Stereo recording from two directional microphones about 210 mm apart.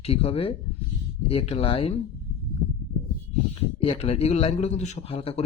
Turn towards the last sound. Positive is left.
turn(degrees=25)  # may be behind; listen again after turning